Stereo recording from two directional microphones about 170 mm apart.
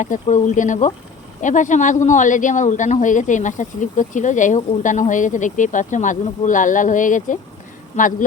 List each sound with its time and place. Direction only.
0.0 s speech: 45° left (ahead or behind)